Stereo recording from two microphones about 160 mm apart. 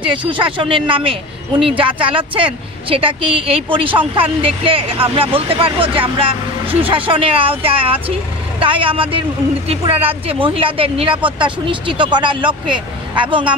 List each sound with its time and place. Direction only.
0.0 s a woman's voice: 30° right (ahead or behind)